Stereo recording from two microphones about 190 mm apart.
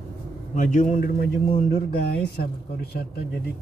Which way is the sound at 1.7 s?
55° left (ahead or behind).